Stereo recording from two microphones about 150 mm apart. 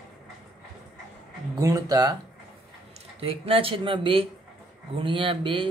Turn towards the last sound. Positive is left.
turn(degrees=-35)  # may be behind; listen again after turning